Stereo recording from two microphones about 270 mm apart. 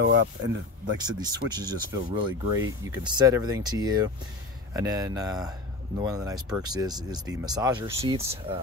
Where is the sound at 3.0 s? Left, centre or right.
Centre.